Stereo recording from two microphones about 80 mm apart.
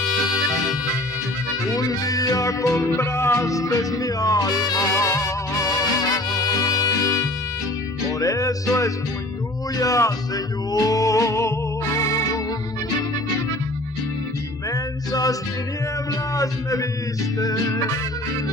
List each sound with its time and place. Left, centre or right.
1.8 s music: left
14.7 s music: left
17.4 s music: left